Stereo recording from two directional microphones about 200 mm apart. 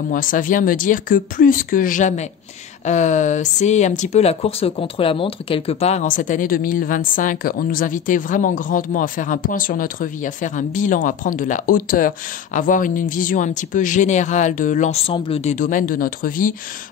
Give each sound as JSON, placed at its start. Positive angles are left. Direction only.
{"t": 0.1, "sound": "speech", "side_deg": 40}